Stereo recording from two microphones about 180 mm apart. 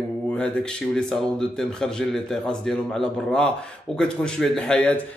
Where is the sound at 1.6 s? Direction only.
5° left (ahead or behind).